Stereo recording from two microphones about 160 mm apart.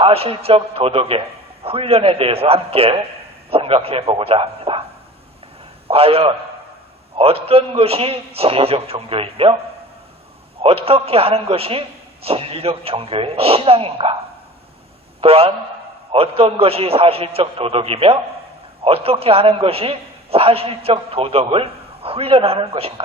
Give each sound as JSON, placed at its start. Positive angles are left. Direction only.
{"t": 0.0, "sound": "a man's voice", "side_deg": -35}
{"t": 5.9, "sound": "a man's voice", "side_deg": -35}
{"t": 10.6, "sound": "a man's voice", "side_deg": -35}
{"t": 15.2, "sound": "a man's voice", "side_deg": -35}